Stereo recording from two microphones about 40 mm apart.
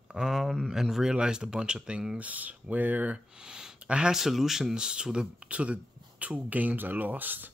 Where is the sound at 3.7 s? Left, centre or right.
Right.